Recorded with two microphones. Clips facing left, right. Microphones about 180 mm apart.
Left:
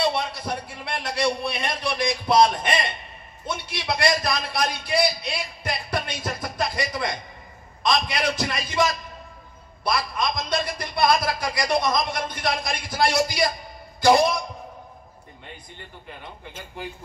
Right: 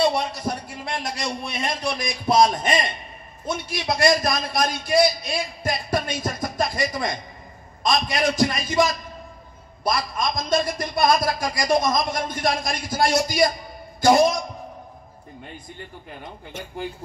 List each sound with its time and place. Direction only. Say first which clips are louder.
0.1 s a man's voice: right 2 dB; 45° right (ahead or behind)
3.4 s a man's voice: right 3 dB; 45° right (ahead or behind)
9.8 s a man's voice: right 1 dB; 45° right (ahead or behind)